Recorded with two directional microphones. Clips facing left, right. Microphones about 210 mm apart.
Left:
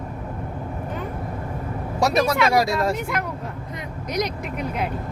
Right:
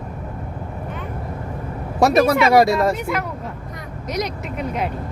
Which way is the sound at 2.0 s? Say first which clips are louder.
Right 5 dB; 55° right (ahead or behind).